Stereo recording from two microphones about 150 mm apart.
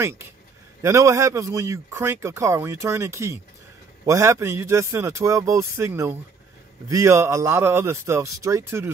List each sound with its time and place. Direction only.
0.8 s speech: 20° right (ahead or behind)